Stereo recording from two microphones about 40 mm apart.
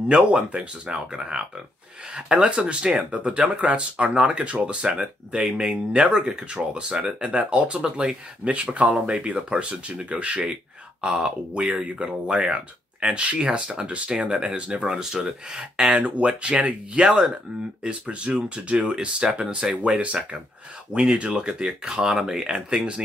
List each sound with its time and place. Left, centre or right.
0.1 s speech: right
7.8 s speech: right
8.6 s speech: right
11.8 s speech: right
14.8 s speech: centre